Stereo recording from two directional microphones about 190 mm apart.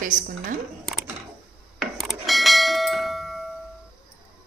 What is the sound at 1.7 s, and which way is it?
Bell, centre (ahead or behind).